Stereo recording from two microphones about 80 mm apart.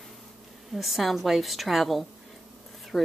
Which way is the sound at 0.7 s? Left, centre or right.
Centre.